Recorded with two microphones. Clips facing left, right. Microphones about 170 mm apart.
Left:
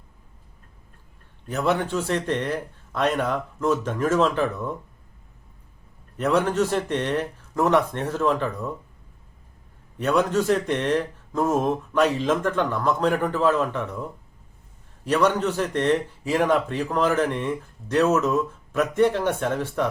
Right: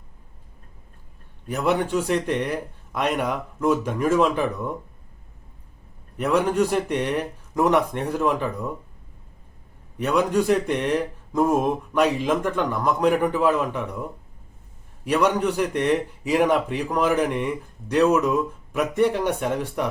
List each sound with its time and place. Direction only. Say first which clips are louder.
1.5 s a man's voice: right 1 dB; 15° right (ahead or behind)
6.1 s a man's voice: right 1 dB; 10° right (ahead or behind)
10.0 s a man's voice: even; 15° right (ahead or behind)
15.0 s a man's voice: even; 15° right (ahead or behind)